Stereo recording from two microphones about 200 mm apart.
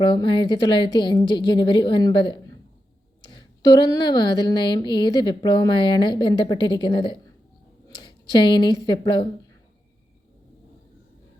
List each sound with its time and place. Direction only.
0.0 s speech: 25° left (ahead or behind)
4.0 s speech: 20° left (ahead or behind)